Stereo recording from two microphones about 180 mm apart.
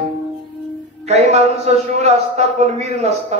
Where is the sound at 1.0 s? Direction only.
35° right (ahead or behind).